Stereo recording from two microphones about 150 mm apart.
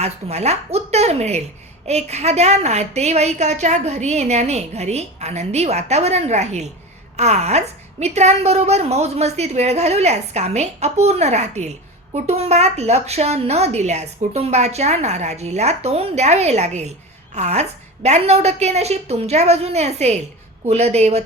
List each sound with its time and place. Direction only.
0.0 s a woman's voice: 45° right (ahead or behind)